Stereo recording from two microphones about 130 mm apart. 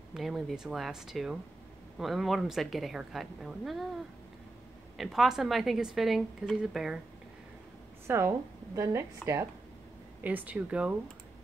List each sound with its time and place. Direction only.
0.1 s a woman's voice: centre (ahead or behind)
4.9 s a woman's voice: centre (ahead or behind)
8.1 s a woman's voice: 20° right (ahead or behind)